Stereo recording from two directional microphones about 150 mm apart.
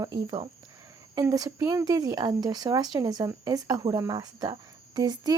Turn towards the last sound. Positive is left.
turn(degrees=-25)  # may be behind; listen again after turning